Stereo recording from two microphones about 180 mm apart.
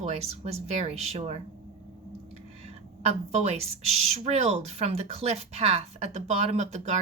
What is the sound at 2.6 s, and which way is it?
Speech, 35° right (ahead or behind).